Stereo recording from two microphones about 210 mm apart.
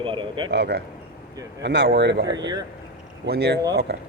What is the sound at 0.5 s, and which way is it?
Speech, 55° right (ahead or behind).